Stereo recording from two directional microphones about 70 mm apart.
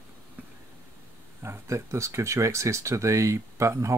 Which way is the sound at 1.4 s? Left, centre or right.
Right.